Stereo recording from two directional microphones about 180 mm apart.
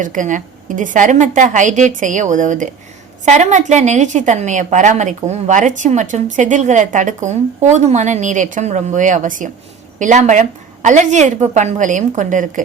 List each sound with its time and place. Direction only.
0.0 s a woman's voice: 45° right (ahead or behind)